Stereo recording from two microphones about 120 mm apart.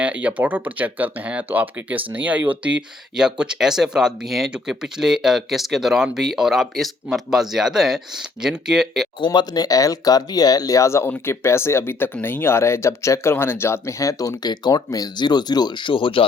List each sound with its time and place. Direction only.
0.0 s speech: 10° right (ahead or behind)
9.2 s speech: 40° left (ahead or behind)